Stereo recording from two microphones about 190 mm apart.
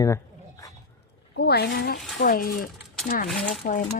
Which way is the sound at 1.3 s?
60° left (ahead or behind).